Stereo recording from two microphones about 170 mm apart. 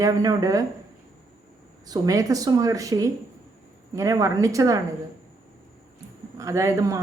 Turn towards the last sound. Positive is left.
turn(degrees=-15)  # may be behind; listen again after turning